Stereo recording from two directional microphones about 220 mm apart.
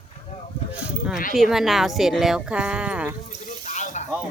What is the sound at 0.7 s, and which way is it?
Sheep, 5° right (ahead or behind).